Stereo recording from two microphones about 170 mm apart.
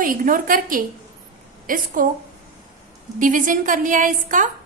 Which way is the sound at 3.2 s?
50° right (ahead or behind).